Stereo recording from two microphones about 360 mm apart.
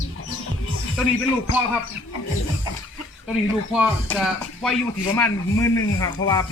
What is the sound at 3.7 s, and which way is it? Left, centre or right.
Speech, centre.